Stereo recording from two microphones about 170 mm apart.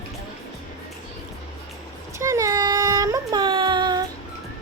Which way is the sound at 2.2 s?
20° right (ahead or behind).